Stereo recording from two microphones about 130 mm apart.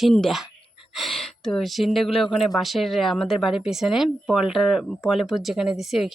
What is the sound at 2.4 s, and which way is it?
Speech, centre (ahead or behind).